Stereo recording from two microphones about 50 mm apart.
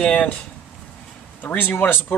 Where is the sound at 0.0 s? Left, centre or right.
Centre.